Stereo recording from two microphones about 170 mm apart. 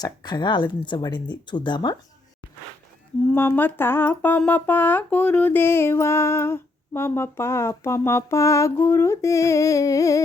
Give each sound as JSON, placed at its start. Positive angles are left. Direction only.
{"t": 0.0, "sound": "speech", "side_deg": 25}
{"t": 3.3, "sound": "speech", "side_deg": 10}